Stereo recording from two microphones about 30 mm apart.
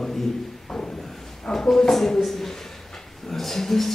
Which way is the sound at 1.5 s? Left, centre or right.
Centre.